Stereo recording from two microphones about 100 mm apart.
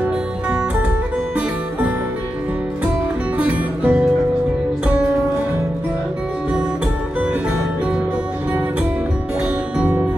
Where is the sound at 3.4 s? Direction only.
15° right (ahead or behind).